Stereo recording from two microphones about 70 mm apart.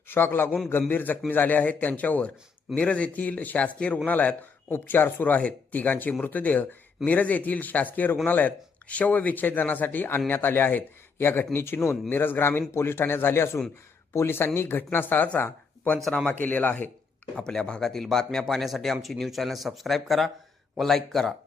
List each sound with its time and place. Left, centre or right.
0.1 s a man's voice: left
16.1 s a man's voice: centre
17.3 s speech: centre